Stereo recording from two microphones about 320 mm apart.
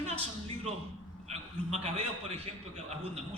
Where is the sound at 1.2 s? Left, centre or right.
Centre.